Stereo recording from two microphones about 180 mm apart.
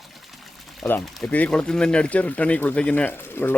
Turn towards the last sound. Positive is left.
turn(degrees=10)  # may be behind; listen again after turning